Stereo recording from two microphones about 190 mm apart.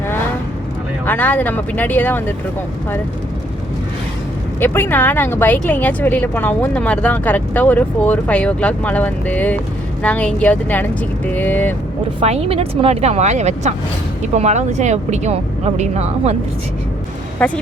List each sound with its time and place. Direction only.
1.0 s speech: 10° left (ahead or behind)
4.6 s speech: 10° left (ahead or behind)
12.2 s speech: 35° right (ahead or behind)
17.4 s speech: 5° left (ahead or behind)